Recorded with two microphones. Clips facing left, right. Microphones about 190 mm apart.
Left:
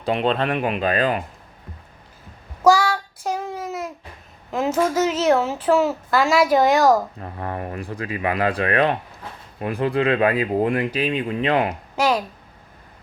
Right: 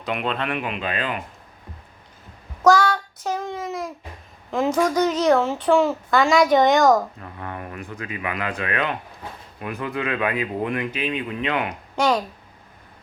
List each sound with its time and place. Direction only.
0.0 s speech: 30° left (ahead or behind)
2.6 s child singing: 10° left (ahead or behind)
4.5 s a woman's voice: 5° left (ahead or behind)
7.2 s speech: 35° left (ahead or behind)
11.9 s speech: 5° left (ahead or behind)